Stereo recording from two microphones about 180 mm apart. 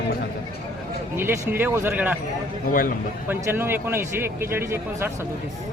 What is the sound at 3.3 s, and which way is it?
A man's voice, 10° right (ahead or behind).